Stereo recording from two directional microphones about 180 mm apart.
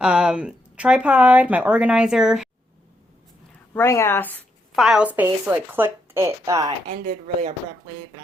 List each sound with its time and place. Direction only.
0.0 s a woman's voice: 5° right (ahead or behind)
3.8 s a woman's voice: 15° left (ahead or behind); by 6.7 s 20° right (ahead or behind)
6.8 s speech: 45° right (ahead or behind)